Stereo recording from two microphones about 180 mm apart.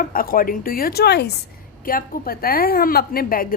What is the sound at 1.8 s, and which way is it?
A woman's voice, 50° left (ahead or behind).